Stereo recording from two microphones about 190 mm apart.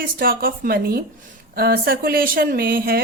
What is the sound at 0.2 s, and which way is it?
Speech, 50° right (ahead or behind).